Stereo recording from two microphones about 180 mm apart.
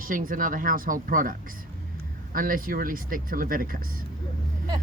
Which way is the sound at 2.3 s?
50° right (ahead or behind).